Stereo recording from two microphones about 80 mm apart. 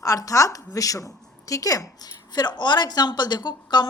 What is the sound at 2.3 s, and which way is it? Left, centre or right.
A woman's voice, left.